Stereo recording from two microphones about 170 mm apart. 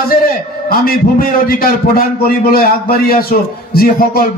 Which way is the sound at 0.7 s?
60° left (ahead or behind).